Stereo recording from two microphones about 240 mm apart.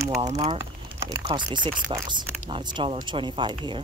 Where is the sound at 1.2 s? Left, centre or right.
Centre.